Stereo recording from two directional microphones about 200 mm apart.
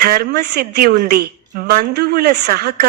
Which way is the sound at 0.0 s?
50° right (ahead or behind).